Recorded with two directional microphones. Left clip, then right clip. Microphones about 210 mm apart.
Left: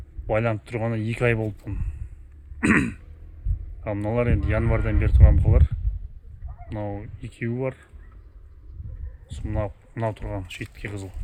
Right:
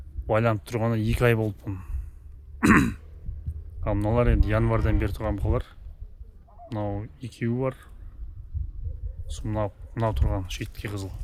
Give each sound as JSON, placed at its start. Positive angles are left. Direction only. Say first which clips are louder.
{"t": 0.3, "sound": "speech", "louder": "even", "side_deg": -10}
{"t": 2.6, "sound": "throat clearing", "louder": "right 1 dB", "side_deg": -15}
{"t": 3.8, "sound": "speech", "louder": "even", "side_deg": -10}
{"t": 9.2, "sound": "speech", "louder": "right 1 dB", "side_deg": -10}